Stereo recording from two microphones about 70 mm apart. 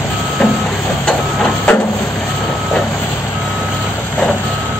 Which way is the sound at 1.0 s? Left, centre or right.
Centre.